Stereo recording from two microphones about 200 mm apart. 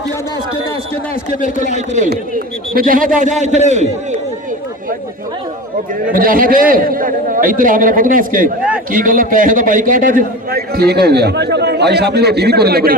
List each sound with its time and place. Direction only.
1.4 s a man's voice: 40° left (ahead or behind)
2.7 s a man's voice: 45° right (ahead or behind)
6.1 s a man's voice: 45° right (ahead or behind)